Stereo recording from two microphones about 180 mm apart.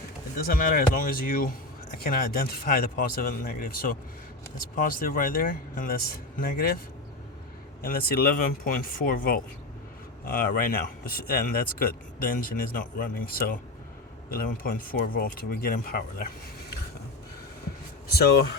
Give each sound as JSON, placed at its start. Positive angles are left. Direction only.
{"t": 0.3, "sound": "speech", "side_deg": 55}
{"t": 7.8, "sound": "speech", "side_deg": 55}
{"t": 18.1, "sound": "speech", "side_deg": 60}